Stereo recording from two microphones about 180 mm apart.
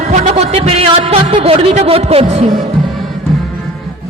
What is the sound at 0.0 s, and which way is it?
Speech, 40° right (ahead or behind).